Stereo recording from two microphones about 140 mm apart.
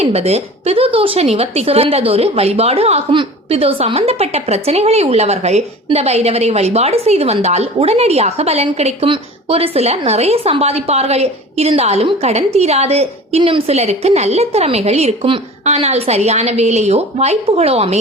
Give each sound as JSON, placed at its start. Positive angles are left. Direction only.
{"t": 0.0, "sound": "a woman's voice", "side_deg": -45}